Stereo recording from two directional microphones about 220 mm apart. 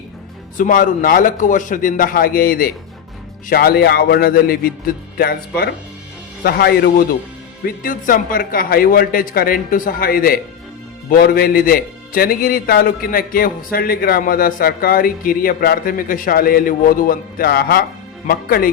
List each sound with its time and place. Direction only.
0.5 s a man's voice: 35° left (ahead or behind)